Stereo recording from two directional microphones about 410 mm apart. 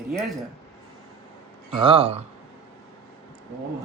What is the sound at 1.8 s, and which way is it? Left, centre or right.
Speech, centre.